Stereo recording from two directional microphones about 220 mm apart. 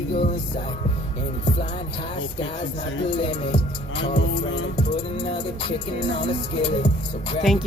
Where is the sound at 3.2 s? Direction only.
20° left (ahead or behind).